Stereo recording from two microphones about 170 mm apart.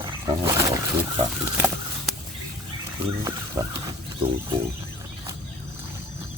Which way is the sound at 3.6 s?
20° right (ahead or behind).